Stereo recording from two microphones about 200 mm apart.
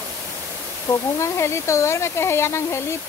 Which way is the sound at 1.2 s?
15° left (ahead or behind).